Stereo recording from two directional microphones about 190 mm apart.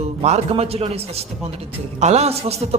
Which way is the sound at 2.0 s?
35° right (ahead or behind).